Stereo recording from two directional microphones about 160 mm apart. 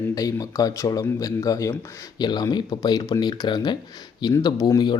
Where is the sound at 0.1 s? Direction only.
20° left (ahead or behind).